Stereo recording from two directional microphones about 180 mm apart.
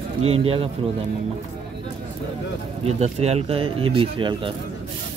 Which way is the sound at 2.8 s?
35° right (ahead or behind).